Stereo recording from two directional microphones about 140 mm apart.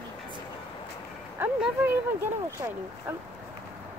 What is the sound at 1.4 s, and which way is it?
Speech, 15° right (ahead or behind).